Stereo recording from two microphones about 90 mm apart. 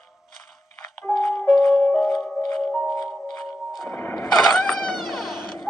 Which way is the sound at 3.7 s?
Centre (ahead or behind).